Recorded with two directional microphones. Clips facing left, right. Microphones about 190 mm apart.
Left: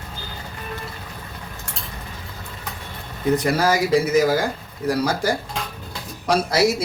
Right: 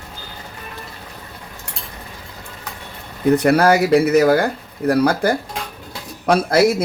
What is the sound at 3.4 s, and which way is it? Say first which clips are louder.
Speech: right 6 dB; 65° right (ahead or behind).